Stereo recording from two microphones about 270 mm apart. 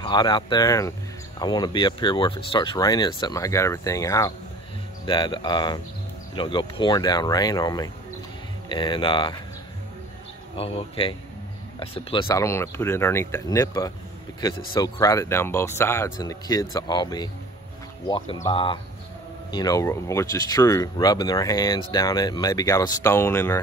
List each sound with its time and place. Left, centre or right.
0.0 s speech: centre
10.6 s speech: left